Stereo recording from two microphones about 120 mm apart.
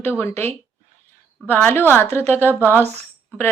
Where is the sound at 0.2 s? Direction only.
20° left (ahead or behind).